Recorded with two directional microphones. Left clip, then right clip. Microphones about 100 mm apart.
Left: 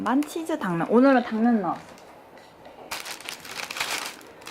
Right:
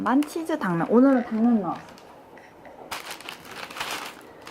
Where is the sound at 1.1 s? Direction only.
20° right (ahead or behind).